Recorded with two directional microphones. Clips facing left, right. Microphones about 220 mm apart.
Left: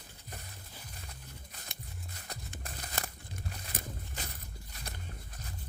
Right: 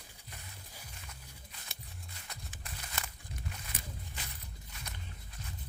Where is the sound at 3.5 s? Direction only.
40° left (ahead or behind).